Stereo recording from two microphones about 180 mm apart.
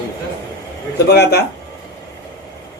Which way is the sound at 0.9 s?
65° left (ahead or behind).